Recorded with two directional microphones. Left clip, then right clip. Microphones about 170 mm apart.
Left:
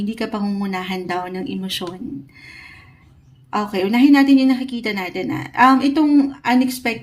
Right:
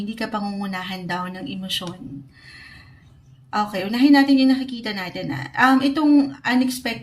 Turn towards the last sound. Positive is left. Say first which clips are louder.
# left 3 dB
turn(degrees=30)  # may be behind; listen again after turning